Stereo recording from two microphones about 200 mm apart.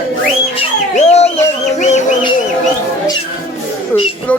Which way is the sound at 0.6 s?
30° left (ahead or behind).